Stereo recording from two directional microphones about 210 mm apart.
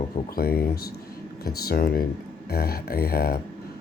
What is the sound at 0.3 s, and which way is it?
Speech, 45° left (ahead or behind).